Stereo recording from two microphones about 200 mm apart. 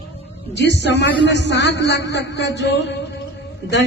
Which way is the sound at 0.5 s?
60° left (ahead or behind).